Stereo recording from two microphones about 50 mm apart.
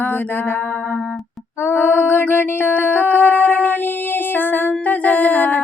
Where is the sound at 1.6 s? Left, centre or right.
Left.